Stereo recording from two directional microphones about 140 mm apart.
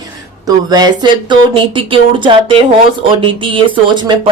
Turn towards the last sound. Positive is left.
turn(degrees=-35)  # may be behind; listen again after turning